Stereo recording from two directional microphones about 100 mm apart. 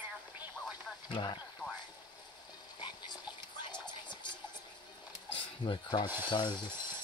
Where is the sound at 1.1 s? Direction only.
50° left (ahead or behind).